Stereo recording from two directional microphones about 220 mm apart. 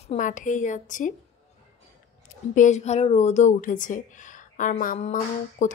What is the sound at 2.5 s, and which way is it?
Speech, 35° left (ahead or behind).